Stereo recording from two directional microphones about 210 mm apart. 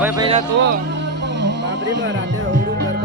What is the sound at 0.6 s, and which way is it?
Music, 55° right (ahead or behind).